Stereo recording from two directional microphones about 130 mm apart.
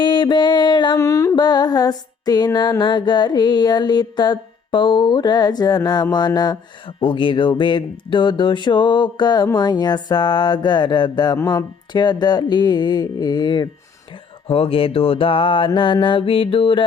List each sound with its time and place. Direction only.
0.0 s music: 35° left (ahead or behind)
0.9 s humming: 25° left (ahead or behind)
1.4 s music: 35° left (ahead or behind)
14.4 s mantra: 45° left (ahead or behind)